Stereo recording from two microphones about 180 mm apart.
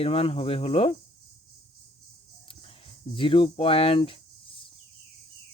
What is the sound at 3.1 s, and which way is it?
Speech, 25° left (ahead or behind).